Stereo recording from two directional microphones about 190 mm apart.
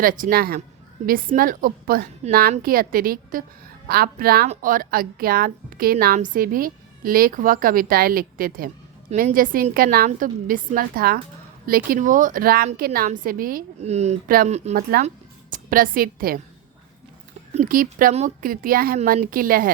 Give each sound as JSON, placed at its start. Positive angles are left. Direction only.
{"t": 0.0, "sound": "a woman's voice", "side_deg": -45}
{"t": 14.3, "sound": "a woman's voice", "side_deg": -50}
{"t": 14.5, "sound": "a woman's voice", "side_deg": -35}
{"t": 14.8, "sound": "a woman's voice", "side_deg": -50}
{"t": 17.5, "sound": "a woman's voice", "side_deg": -45}